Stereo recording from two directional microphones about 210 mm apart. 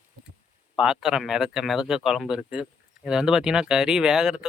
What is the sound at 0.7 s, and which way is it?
A man's voice, 5° right (ahead or behind).